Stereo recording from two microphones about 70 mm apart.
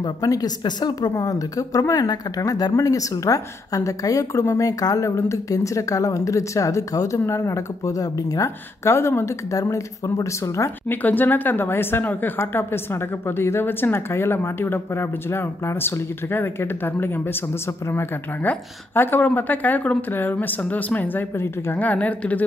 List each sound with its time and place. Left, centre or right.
0.3 s speech: left
1.1 s a woman's voice: left
9.6 s a woman's voice: left
10.9 s a woman's voice: left